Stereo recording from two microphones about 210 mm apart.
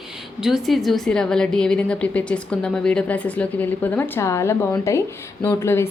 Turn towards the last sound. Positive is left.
turn(degrees=10)  # may be behind; listen again after turning